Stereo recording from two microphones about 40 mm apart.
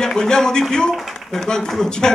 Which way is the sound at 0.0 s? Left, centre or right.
Centre.